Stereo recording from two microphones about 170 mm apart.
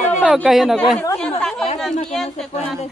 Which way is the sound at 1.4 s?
5° left (ahead or behind).